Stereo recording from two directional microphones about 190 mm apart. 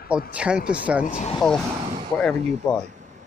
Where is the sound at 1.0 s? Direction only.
40° left (ahead or behind).